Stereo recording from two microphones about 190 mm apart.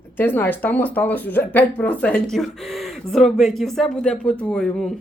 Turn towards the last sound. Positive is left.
turn(degrees=5)  # may be behind; listen again after turning